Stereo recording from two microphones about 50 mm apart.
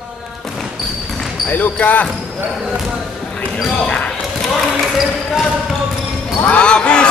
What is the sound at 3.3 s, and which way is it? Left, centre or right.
Basketball bounce, left.